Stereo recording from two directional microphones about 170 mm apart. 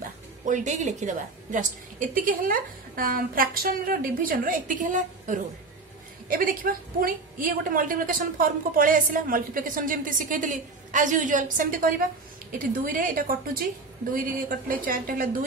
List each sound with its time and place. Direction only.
0.5 s a woman's voice: 45° right (ahead or behind)